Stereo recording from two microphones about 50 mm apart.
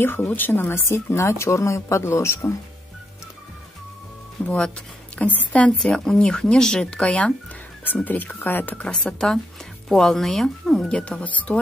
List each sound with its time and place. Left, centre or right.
0.0 s a woman's voice: left
4.5 s speech: left
5.9 s speech: centre
7.8 s speech: left
9.0 s speech: centre; by 11.6 s left